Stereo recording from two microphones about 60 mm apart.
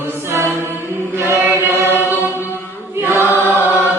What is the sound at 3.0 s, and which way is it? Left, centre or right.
Choir, right.